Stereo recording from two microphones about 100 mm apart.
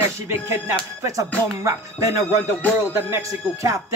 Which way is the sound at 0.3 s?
30° right (ahead or behind).